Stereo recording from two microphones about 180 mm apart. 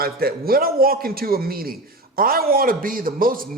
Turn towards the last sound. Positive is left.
turn(degrees=-50)  # may be behind; listen again after turning